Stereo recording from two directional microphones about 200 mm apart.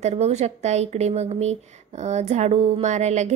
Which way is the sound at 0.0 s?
35° right (ahead or behind).